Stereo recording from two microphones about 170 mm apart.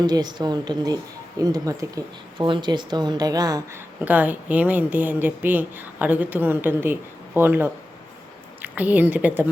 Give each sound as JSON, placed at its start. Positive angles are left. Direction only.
{"t": 0.0, "sound": "speech", "side_deg": -25}
{"t": 4.0, "sound": "speech", "side_deg": -10}